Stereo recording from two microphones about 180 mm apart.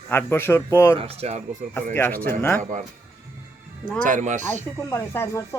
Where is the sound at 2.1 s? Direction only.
50° right (ahead or behind).